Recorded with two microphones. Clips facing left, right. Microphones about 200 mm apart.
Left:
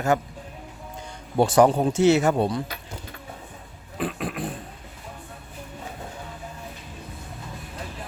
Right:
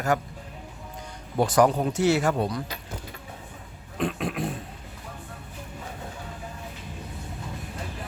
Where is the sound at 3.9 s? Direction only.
Centre (ahead or behind).